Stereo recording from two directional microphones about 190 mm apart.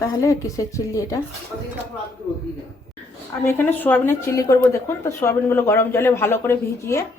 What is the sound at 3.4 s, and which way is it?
A woman's voice, 10° left (ahead or behind).